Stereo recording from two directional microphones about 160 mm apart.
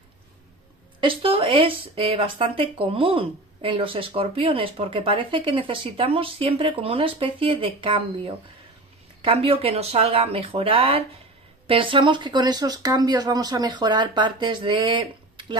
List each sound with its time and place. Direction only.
1.0 s speech: 35° right (ahead or behind)